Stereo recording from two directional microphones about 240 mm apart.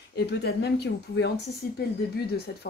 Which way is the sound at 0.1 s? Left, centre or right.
Left.